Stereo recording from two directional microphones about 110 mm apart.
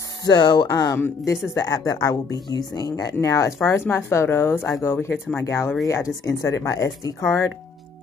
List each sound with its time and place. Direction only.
0.2 s speech: 40° left (ahead or behind)
0.9 s speech: 25° left (ahead or behind)
1.5 s speech: 35° left (ahead or behind)